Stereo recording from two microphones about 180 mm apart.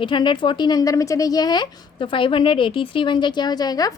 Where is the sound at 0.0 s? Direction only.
25° left (ahead or behind).